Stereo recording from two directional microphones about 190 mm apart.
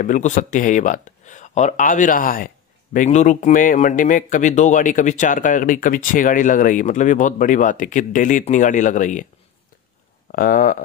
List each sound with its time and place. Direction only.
0.0 s speech: 40° left (ahead or behind)
10.3 s speech: 45° left (ahead or behind)